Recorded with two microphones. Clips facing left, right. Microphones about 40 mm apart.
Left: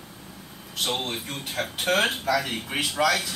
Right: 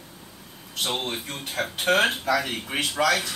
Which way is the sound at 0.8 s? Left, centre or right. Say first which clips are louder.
Even; centre.